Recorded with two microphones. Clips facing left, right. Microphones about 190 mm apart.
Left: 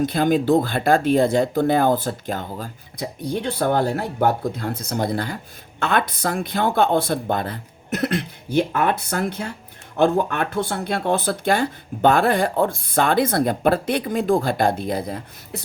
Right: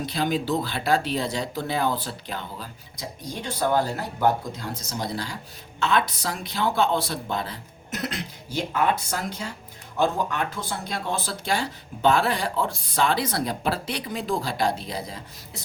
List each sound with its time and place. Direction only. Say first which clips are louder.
0.0 s speech: left 7 dB; 50° left (ahead or behind)